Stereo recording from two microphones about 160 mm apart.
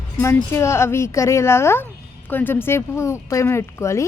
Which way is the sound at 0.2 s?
15° left (ahead or behind).